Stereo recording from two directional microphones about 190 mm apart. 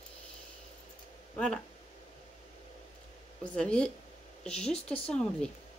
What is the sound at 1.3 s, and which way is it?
Speech, 5° left (ahead or behind).